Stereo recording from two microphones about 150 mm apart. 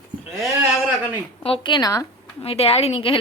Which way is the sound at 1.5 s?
35° left (ahead or behind).